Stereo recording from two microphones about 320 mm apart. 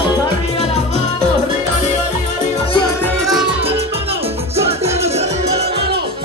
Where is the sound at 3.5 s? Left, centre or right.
Right.